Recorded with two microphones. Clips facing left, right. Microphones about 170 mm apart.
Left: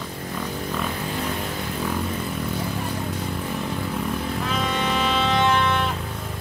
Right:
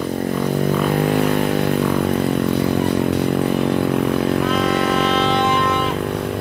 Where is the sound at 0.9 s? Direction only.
65° right (ahead or behind).